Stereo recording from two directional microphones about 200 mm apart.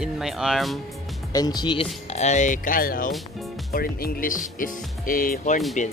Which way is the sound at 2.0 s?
35° left (ahead or behind).